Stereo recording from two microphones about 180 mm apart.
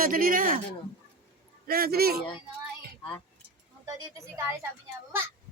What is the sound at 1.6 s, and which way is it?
Speech, 55° right (ahead or behind).